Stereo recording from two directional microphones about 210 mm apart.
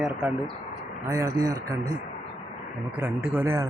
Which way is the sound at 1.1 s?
15° right (ahead or behind).